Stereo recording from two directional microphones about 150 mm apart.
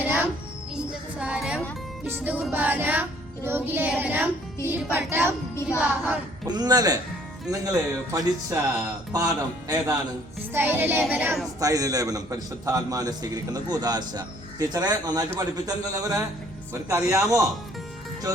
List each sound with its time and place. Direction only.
0.0 s music: 10° right (ahead or behind)
6.5 s a man's voice: 25° right (ahead or behind)
10.5 s music: 15° right (ahead or behind)
11.6 s a man's voice: 25° right (ahead or behind)